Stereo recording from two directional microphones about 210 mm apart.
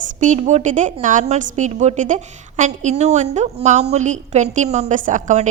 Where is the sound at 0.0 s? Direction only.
35° right (ahead or behind).